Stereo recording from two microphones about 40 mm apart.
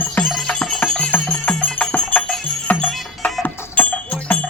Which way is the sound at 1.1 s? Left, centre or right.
Left.